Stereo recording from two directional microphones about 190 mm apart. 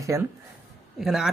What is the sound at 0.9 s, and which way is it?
Speech, centre (ahead or behind).